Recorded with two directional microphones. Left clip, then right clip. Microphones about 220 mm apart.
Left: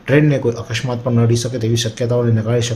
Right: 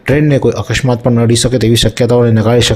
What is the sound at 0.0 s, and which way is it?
Speech, 35° right (ahead or behind).